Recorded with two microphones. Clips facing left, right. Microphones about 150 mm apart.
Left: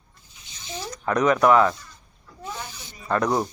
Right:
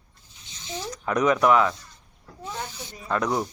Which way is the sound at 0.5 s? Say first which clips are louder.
Right 1 dB; 20° right (ahead or behind).